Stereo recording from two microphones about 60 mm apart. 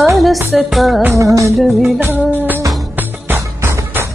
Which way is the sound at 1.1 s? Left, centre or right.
Right.